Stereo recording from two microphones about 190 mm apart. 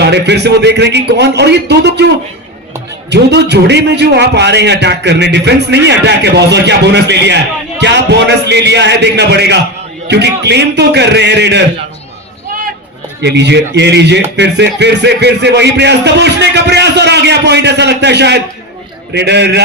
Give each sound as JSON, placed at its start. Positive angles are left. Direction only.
{"t": 0.0, "sound": "speech", "side_deg": -60}
{"t": 3.1, "sound": "speech", "side_deg": -65}
{"t": 13.2, "sound": "speech", "side_deg": -65}